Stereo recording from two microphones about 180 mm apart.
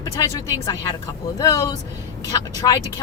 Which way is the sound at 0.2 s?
20° left (ahead or behind).